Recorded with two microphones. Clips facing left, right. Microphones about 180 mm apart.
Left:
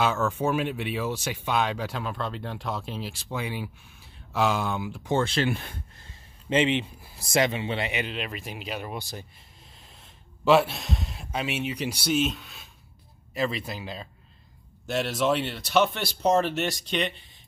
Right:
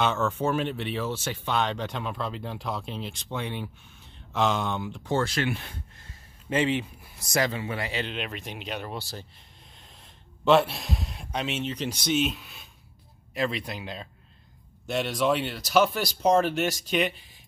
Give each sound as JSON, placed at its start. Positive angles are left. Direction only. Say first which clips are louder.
{"t": 0.0, "sound": "speech", "louder": "left 1 dB", "side_deg": 5}
{"t": 5.1, "sound": "speech", "louder": "left 2 dB", "side_deg": 25}
{"t": 5.5, "sound": "speech", "louder": "left 2 dB", "side_deg": 45}
{"t": 6.5, "sound": "speech", "louder": "left 2 dB", "side_deg": 20}
{"t": 8.0, "sound": "speech", "louder": "even", "side_deg": 0}
{"t": 9.8, "sound": "speech", "louder": "even", "side_deg": 5}